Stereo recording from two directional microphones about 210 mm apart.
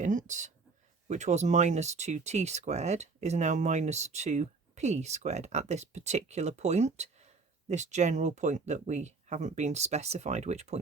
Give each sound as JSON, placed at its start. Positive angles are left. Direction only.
{"t": 0.0, "sound": "speech", "side_deg": -35}